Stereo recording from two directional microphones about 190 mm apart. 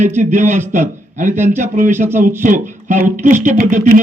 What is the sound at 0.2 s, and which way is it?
A man's voice, 40° right (ahead or behind).